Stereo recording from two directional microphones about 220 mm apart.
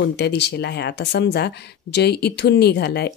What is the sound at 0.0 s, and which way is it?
Speech, 50° left (ahead or behind).